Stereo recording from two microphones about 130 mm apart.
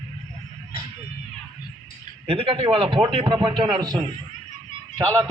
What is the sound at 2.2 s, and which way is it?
A man's voice, 45° right (ahead or behind).